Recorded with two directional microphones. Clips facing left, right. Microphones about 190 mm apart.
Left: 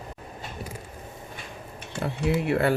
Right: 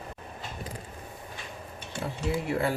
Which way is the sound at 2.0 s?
70° left (ahead or behind).